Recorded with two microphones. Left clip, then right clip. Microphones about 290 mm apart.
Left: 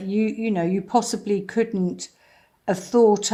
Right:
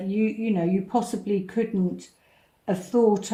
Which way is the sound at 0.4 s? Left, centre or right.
Left.